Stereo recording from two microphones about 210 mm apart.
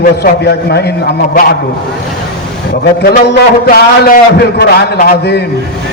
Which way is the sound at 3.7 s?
50° left (ahead or behind).